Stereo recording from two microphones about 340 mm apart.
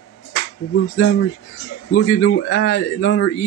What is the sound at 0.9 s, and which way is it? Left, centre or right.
A man's voice, left.